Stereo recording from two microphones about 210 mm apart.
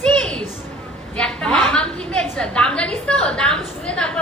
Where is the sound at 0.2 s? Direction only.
5° left (ahead or behind).